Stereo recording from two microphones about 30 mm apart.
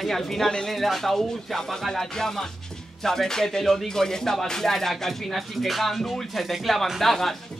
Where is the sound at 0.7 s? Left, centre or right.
Centre.